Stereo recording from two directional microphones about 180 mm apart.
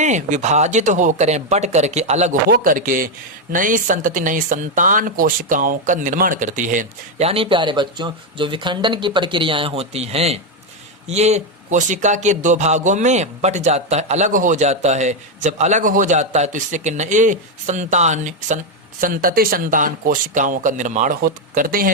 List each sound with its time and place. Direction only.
0.0 s speech: 40° right (ahead or behind)
2.5 s speech: 50° right (ahead or behind)